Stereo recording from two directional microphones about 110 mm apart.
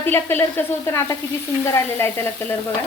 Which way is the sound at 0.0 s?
20° left (ahead or behind).